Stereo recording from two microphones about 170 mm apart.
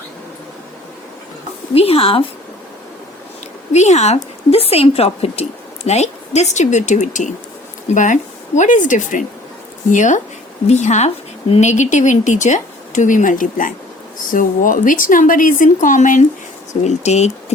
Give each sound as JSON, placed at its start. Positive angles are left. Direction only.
{"t": 1.7, "sound": "speech", "side_deg": 35}
{"t": 3.7, "sound": "a woman's voice", "side_deg": 40}